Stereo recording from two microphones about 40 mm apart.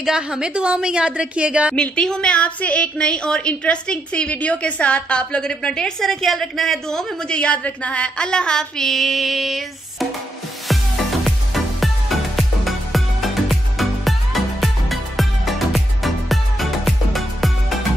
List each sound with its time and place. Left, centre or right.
0.0 s a woman's voice: centre
1.8 s a woman's voice: left
2.3 s female singing: left
3.0 s a woman's voice: left
5.4 s a sound: centre
7.2 s a woman's voice: left
7.6 s a sound: left; by 10.0 s centre
11.2 s music: centre